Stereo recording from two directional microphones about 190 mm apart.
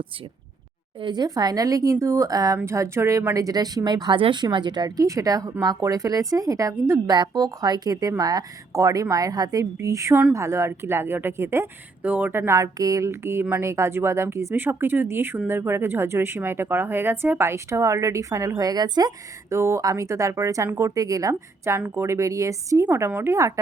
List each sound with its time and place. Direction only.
1.0 s a woman's voice: 20° right (ahead or behind)